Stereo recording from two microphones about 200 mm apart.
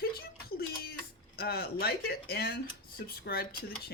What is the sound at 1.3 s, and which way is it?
Speech, 50° left (ahead or behind).